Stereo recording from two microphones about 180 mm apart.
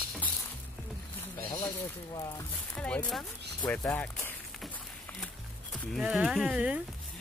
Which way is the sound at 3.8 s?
10° left (ahead or behind).